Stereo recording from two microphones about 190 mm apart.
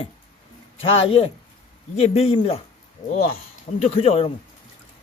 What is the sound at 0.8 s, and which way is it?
A man's voice, 30° left (ahead or behind).